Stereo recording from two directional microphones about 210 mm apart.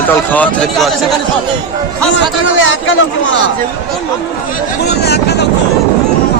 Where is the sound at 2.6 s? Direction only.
65° left (ahead or behind).